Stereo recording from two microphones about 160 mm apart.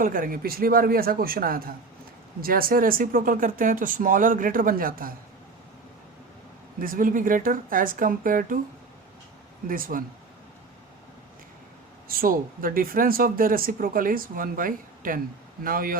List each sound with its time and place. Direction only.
0.0 s speech: 60° right (ahead or behind)
6.7 s speech: 60° right (ahead or behind)
9.6 s speech: 60° right (ahead or behind)
12.0 s speech: 65° right (ahead or behind)